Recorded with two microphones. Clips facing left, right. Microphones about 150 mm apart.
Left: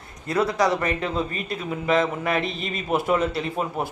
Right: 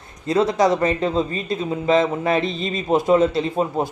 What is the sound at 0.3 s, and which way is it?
Speech, 20° right (ahead or behind).